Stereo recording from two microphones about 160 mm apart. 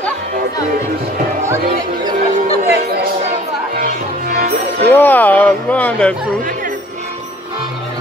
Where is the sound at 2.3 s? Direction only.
55° right (ahead or behind).